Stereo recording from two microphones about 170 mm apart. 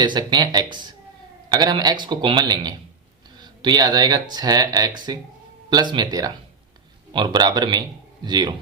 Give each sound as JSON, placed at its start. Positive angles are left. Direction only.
{"t": 0.0, "sound": "speech", "side_deg": -25}